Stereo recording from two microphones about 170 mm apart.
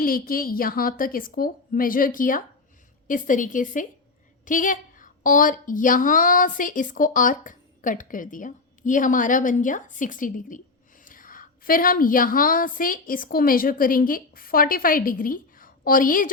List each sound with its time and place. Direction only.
0.0 s a woman's voice: 55° left (ahead or behind)